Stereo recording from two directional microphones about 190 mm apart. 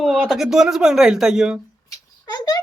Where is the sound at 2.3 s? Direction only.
20° left (ahead or behind).